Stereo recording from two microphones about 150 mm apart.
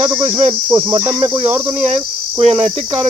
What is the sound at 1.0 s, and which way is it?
Speech, 15° right (ahead or behind).